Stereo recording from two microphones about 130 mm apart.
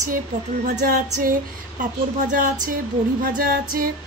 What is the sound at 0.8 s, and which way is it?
A woman's voice, 75° right (ahead or behind).